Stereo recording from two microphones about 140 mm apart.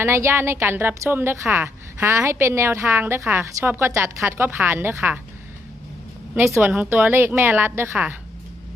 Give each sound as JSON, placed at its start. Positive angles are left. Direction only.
{"t": 0.0, "sound": "a woman's voice", "side_deg": -20}
{"t": 6.3, "sound": "a woman's voice", "side_deg": -15}